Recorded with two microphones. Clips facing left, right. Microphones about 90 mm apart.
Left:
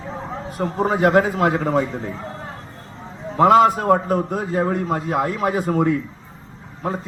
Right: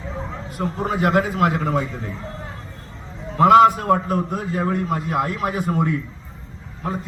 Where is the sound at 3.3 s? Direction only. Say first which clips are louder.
Right 1 dB; 30° left (ahead or behind).